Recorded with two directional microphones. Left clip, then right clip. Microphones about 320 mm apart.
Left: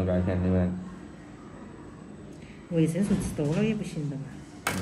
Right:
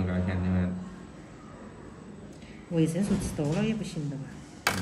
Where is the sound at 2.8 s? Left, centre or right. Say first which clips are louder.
Left 1 dB; centre.